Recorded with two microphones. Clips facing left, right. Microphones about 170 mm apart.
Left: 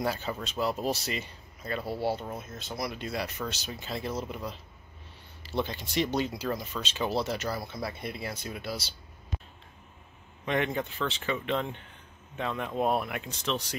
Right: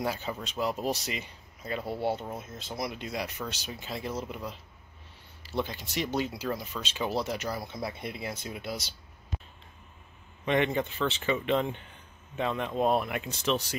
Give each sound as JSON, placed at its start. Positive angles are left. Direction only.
{"t": 0.0, "sound": "speech", "side_deg": -10}
{"t": 10.4, "sound": "speech", "side_deg": 0}